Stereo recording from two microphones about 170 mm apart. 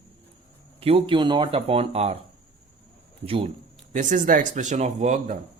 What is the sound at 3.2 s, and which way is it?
Speech, 35° right (ahead or behind).